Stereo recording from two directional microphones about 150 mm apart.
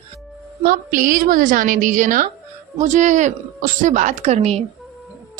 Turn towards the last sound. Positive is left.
turn(degrees=-45)  # may be behind; listen again after turning